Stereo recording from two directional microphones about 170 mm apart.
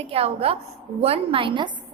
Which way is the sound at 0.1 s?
35° right (ahead or behind).